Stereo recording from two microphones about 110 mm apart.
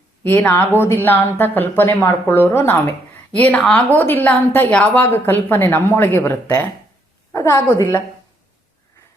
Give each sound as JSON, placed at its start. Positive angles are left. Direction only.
{"t": 0.3, "sound": "a woman's voice", "side_deg": 20}
{"t": 3.3, "sound": "a woman's voice", "side_deg": 10}